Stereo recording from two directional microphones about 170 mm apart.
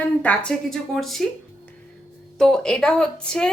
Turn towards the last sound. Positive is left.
turn(degrees=5)  # may be behind; listen again after turning